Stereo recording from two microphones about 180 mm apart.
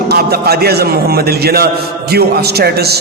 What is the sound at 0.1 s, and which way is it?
A man's voice, 60° right (ahead or behind).